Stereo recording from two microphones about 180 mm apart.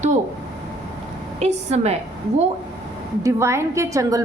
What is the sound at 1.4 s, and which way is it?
Speech, 35° right (ahead or behind).